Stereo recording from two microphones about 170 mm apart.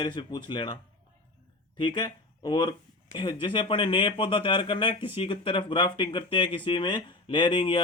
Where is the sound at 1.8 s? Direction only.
25° left (ahead or behind).